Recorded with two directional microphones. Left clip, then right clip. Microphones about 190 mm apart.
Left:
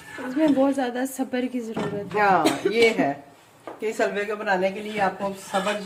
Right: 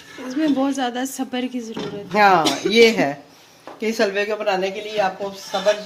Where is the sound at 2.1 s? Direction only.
55° right (ahead or behind).